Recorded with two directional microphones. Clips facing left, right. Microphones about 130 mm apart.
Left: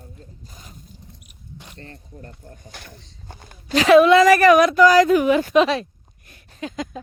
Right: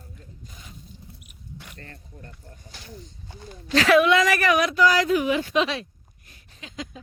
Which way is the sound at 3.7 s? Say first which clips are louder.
Left 4 dB; 15° left (ahead or behind).